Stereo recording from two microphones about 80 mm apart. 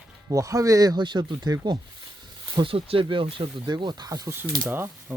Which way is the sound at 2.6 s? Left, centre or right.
Right.